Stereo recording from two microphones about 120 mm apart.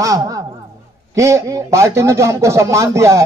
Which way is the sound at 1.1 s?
25° right (ahead or behind).